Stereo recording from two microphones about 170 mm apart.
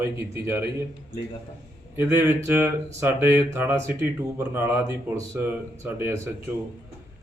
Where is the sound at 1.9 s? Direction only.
10° right (ahead or behind).